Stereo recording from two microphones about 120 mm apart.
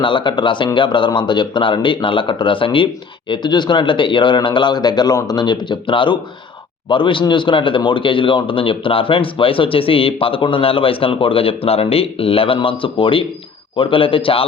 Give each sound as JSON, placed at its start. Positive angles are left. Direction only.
{"t": 0.0, "sound": "speech", "side_deg": 45}